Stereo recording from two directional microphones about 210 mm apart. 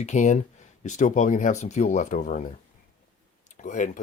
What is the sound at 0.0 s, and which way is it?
Speech, 35° left (ahead or behind).